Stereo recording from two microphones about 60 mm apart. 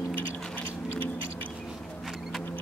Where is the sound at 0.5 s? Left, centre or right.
Left.